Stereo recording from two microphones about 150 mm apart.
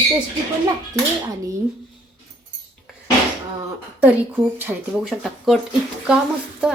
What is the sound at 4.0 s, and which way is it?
Speech, 10° right (ahead or behind).